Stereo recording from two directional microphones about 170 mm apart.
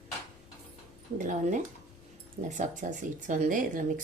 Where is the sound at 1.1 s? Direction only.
45° right (ahead or behind).